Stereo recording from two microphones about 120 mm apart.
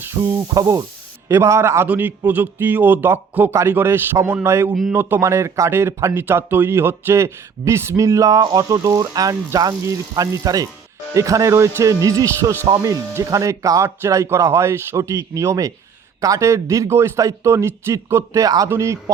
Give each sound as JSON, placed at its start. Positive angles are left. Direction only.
{"t": 0.0, "sound": "speech", "side_deg": -20}